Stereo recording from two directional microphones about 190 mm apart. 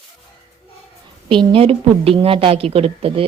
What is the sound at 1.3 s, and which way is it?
A woman's voice, 30° right (ahead or behind).